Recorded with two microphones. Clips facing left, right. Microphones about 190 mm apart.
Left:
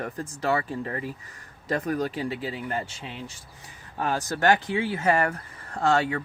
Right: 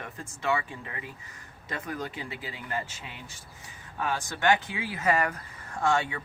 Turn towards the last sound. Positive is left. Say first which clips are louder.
# left 4 dB
turn(degrees=35)  # may be behind; listen again after turning